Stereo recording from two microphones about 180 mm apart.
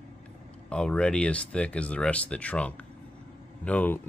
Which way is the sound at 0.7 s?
5° left (ahead or behind).